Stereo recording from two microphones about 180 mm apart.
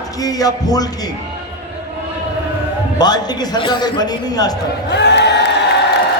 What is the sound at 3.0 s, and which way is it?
A man's voice, 20° left (ahead or behind).